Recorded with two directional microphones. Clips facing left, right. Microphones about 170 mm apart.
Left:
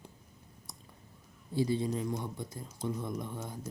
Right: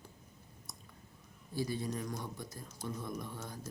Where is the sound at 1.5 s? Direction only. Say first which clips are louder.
Left 6 dB; 25° left (ahead or behind).